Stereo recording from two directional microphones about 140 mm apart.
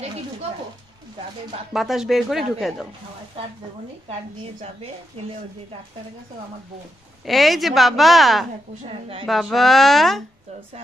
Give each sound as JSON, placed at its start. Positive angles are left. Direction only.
{"t": 1.7, "sound": "a woman's voice", "side_deg": 0}
{"t": 3.4, "sound": "a woman's voice", "side_deg": -40}
{"t": 7.2, "sound": "a woman's voice", "side_deg": 0}